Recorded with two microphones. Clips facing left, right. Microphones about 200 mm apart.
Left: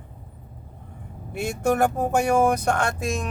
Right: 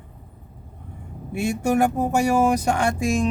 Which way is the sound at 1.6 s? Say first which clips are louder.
Even; 10° right (ahead or behind).